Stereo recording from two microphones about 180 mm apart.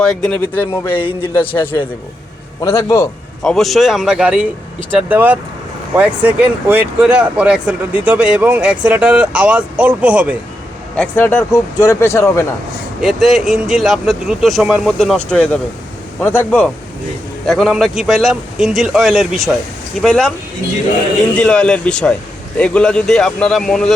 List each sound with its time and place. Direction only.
0.0 s a man's voice: 5° left (ahead or behind)
0.9 s speech: 30° left (ahead or behind)
1.3 s a man's voice: 10° left (ahead or behind)
3.4 s speech: centre (ahead or behind)
10.9 s a man's voice: 10° left (ahead or behind)
13.0 s a man's voice: centre (ahead or behind)
21.3 s speech: 5° left (ahead or behind)